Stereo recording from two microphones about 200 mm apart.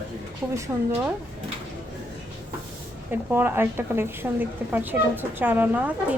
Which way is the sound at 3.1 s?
10° right (ahead or behind).